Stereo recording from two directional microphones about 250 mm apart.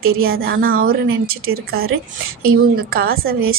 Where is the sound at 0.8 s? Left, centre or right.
Right.